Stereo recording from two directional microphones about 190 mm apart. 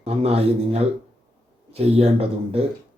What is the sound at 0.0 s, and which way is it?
Speech, 30° right (ahead or behind).